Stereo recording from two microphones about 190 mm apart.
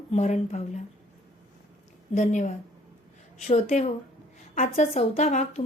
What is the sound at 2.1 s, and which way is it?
A woman's voice, 40° left (ahead or behind).